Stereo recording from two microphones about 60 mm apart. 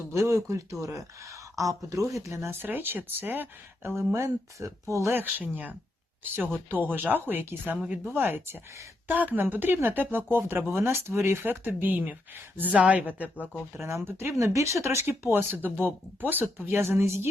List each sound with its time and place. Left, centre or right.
0.1 s speech: right
2.6 s speech: right
3.9 s speech: right
5.4 s speech: right
11.6 s speech: right
13.7 s speech: right